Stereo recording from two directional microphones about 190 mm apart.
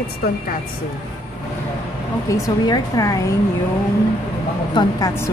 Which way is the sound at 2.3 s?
20° left (ahead or behind).